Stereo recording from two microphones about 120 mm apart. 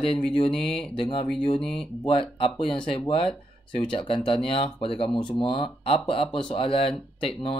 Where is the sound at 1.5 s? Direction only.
5° left (ahead or behind).